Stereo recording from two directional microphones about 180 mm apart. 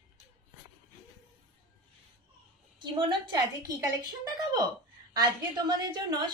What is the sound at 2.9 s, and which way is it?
A woman's voice, 25° right (ahead or behind).